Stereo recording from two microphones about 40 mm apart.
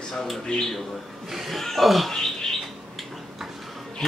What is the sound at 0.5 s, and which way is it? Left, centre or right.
Speech, left.